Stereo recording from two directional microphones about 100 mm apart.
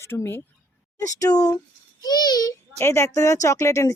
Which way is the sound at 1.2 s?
35° left (ahead or behind).